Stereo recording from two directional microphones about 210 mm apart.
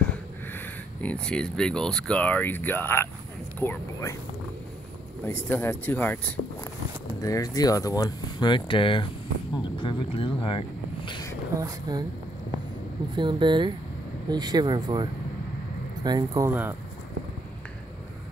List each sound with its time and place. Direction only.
0.6 s speech: 5° left (ahead or behind)
5.2 s speech: 10° left (ahead or behind)
11.1 s a sound: 20° left (ahead or behind)
11.5 s speech: 15° right (ahead or behind)
13.1 s speech: 20° right (ahead or behind)
16.4 s speech: 10° right (ahead or behind)